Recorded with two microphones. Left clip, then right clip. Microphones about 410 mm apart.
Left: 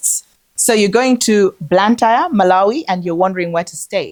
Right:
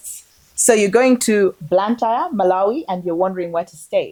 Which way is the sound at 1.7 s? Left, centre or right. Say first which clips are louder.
Left 7 dB; left.